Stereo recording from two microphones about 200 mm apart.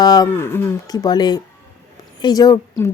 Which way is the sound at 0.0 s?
20° left (ahead or behind).